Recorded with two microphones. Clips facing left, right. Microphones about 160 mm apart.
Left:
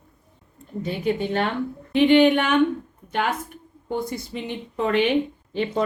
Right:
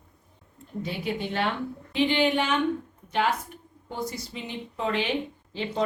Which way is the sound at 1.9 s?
55° left (ahead or behind).